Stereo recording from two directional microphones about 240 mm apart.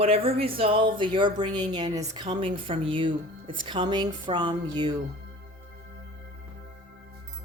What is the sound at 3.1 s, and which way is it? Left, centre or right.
Speech, right.